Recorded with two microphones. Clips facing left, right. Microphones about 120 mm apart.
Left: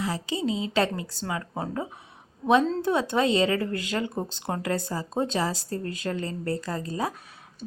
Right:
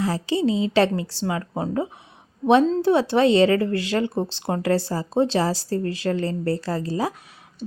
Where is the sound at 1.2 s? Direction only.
25° right (ahead or behind).